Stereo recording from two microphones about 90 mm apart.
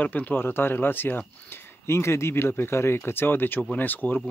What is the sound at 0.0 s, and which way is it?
Speech, 20° left (ahead or behind).